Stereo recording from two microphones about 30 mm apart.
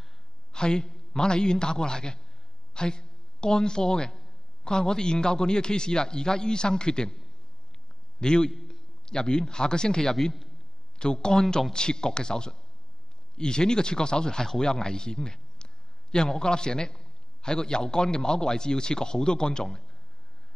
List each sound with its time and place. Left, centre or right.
0.5 s a man's voice: left
8.2 s a man's voice: left
8.5 s a sound: centre
9.0 s speech: left